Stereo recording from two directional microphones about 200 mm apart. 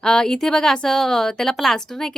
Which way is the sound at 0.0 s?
5° left (ahead or behind).